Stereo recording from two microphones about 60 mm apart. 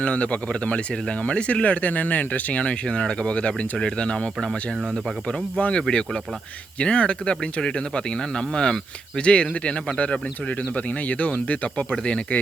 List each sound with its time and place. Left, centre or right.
0.0 s speech: left
5.5 s speech: left